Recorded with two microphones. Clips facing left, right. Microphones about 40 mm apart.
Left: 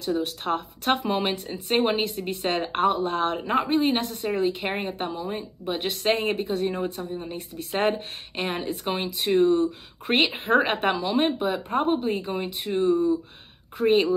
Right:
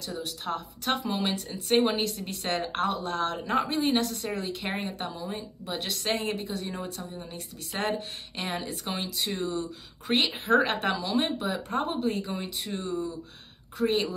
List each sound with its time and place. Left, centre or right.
0.0 s speech: left